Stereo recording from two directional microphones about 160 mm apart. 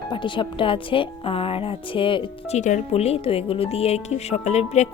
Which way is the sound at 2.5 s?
50° left (ahead or behind).